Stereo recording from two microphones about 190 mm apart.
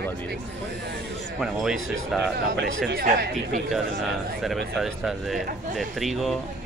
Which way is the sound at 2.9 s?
50° right (ahead or behind).